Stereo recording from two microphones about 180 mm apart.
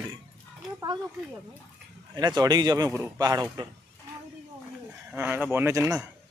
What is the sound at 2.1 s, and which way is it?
Speech, 20° right (ahead or behind).